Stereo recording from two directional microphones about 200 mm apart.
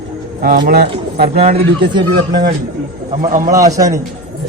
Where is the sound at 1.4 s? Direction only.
30° right (ahead or behind).